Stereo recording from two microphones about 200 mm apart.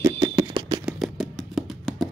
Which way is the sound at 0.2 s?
25° right (ahead or behind).